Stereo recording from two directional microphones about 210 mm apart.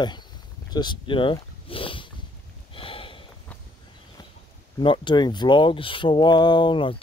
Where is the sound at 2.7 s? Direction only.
25° left (ahead or behind).